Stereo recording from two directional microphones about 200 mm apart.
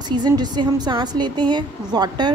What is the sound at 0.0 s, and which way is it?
A woman's voice, 20° right (ahead or behind).